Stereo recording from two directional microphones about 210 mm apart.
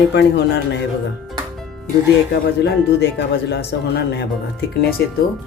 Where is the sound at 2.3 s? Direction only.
50° left (ahead or behind).